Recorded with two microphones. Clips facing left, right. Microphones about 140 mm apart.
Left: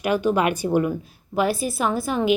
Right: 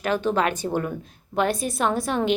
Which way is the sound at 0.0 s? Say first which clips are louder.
Left 2 dB; 10° left (ahead or behind).